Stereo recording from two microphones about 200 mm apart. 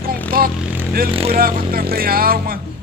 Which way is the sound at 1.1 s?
30° right (ahead or behind).